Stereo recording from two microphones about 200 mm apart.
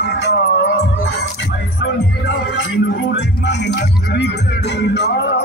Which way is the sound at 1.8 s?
70° left (ahead or behind).